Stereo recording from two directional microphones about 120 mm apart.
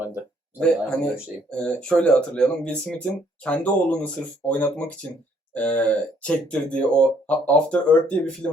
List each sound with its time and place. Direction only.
0.6 s speech: 5° left (ahead or behind)